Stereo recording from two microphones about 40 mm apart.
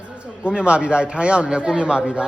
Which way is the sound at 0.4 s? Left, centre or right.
Right.